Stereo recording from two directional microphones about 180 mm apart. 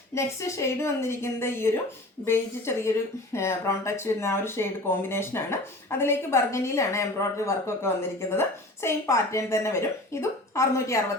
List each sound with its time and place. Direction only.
0.1 s a woman's voice: 15° left (ahead or behind)